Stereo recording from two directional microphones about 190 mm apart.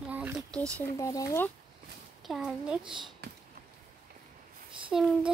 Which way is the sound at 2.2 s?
Centre (ahead or behind).